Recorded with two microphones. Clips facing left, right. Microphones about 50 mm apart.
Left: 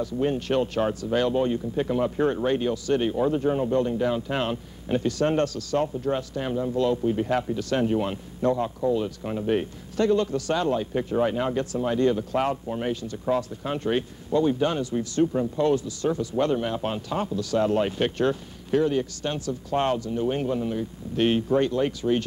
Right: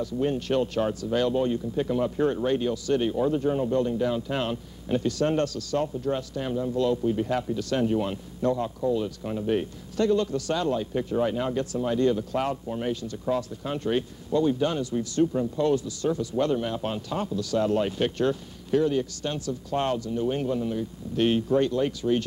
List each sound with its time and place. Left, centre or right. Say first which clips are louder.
0.0 s speech: left 1 dB; left